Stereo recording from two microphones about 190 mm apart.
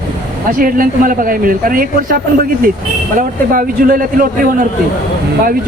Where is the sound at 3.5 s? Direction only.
45° right (ahead or behind).